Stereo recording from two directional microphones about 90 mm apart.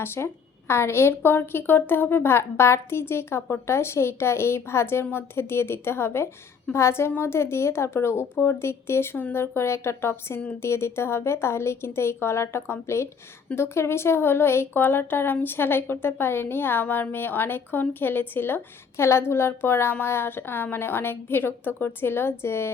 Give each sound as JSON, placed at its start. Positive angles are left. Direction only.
{"t": 0.0, "sound": "speech", "side_deg": 25}